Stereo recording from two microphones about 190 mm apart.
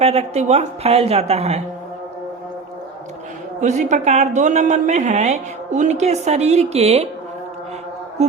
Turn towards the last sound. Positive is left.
turn(degrees=-35)  # may be behind; listen again after turning